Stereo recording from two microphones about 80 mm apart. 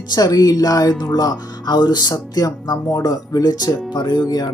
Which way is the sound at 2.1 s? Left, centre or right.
Left.